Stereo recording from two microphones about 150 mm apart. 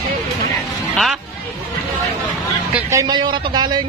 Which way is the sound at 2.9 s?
25° right (ahead or behind).